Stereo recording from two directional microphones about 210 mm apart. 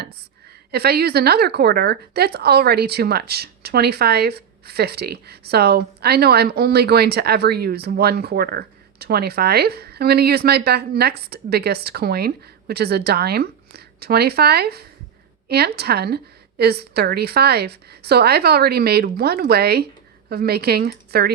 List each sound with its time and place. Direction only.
0.7 s a woman's voice: 50° right (ahead or behind)